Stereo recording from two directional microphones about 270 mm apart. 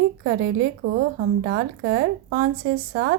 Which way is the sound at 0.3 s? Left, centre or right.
Right.